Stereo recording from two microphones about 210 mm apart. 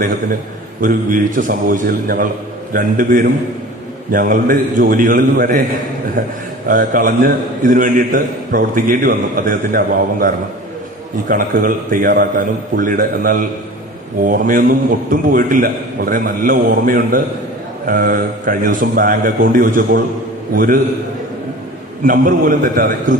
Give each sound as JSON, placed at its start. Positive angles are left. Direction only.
{"t": 0.8, "sound": "a man's voice", "side_deg": -40}
{"t": 22.0, "sound": "a man's voice", "side_deg": -40}